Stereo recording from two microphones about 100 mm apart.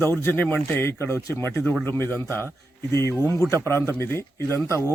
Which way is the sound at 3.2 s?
30° right (ahead or behind).